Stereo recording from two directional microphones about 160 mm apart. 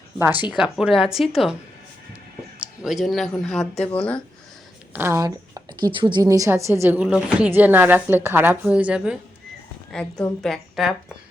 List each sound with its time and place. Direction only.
0.2 s a woman's voice: 10° right (ahead or behind)
2.6 s speech: 5° right (ahead or behind)
4.9 s speech: 15° right (ahead or behind)
5.9 s a woman's voice: 30° right (ahead or behind); by 9.1 s 5° right (ahead or behind)
9.9 s speech: 5° left (ahead or behind)